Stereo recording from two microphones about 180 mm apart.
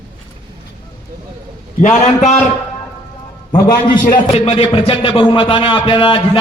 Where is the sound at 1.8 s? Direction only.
40° left (ahead or behind).